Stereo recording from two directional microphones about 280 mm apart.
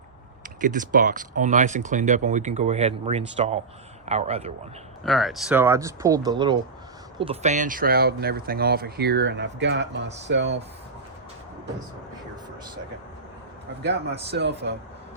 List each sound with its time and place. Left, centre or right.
0.4 s speech: right
5.0 s speech: centre; by 10.6 s right
13.8 s speech: right